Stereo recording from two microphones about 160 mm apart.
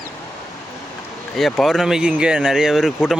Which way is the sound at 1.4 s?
Centre (ahead or behind).